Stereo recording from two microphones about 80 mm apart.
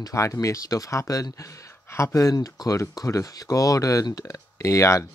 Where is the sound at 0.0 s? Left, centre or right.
Left.